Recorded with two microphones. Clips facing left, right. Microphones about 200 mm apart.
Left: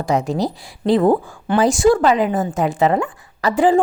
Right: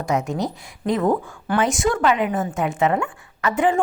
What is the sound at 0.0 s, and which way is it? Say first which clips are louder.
A woman's voice: left 4 dB; 35° left (ahead or behind).